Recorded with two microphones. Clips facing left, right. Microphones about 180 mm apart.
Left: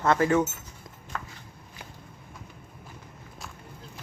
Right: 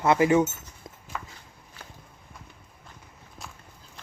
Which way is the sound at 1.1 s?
5° right (ahead or behind).